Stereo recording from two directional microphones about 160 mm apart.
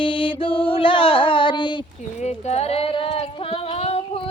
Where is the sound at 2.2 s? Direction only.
40° left (ahead or behind).